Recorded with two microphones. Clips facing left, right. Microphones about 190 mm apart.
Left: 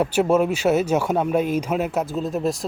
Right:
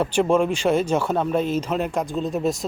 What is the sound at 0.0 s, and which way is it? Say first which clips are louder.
Speech: left 1 dB; 5° left (ahead or behind).